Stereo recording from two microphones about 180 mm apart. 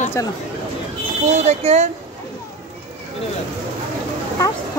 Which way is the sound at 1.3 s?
40° right (ahead or behind).